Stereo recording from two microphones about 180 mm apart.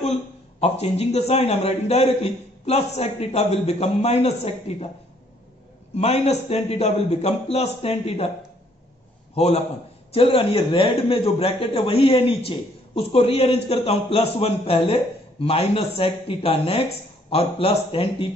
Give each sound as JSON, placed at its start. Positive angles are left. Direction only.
{"t": 0.6, "sound": "speech", "side_deg": 35}
{"t": 5.9, "sound": "speech", "side_deg": 35}
{"t": 9.3, "sound": "a man's voice", "side_deg": 35}